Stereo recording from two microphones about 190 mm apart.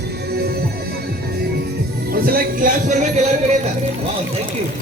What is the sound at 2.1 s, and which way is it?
Speech, 50° right (ahead or behind).